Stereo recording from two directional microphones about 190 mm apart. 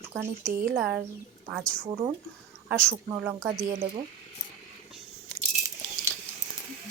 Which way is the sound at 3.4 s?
15° right (ahead or behind).